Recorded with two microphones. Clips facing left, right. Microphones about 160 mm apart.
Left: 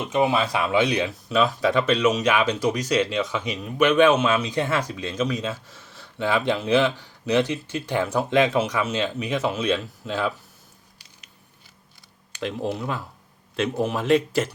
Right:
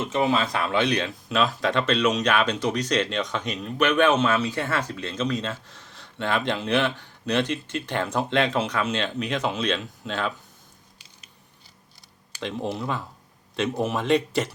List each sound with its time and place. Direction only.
0.0 s speech: 15° left (ahead or behind)
12.4 s speech: 5° left (ahead or behind)